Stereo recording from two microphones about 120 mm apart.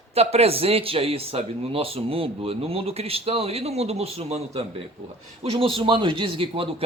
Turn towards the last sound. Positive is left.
turn(degrees=-50)  # may be behind; listen again after turning